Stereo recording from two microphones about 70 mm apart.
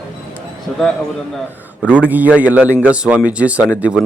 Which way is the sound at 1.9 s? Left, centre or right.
Right.